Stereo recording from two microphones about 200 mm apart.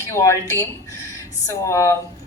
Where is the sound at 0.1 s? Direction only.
15° left (ahead or behind).